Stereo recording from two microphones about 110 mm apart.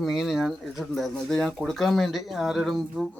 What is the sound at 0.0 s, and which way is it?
Speech, centre (ahead or behind).